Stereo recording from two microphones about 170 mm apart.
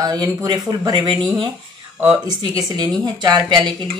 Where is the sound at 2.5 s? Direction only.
25° right (ahead or behind).